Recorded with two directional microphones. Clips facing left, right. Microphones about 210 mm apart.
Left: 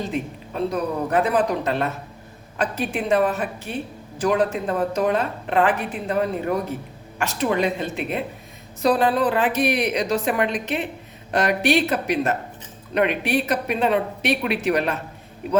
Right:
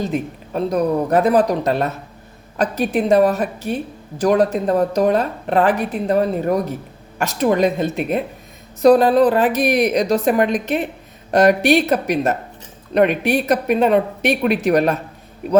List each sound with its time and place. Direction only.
0.0 s a woman's voice: 40° right (ahead or behind)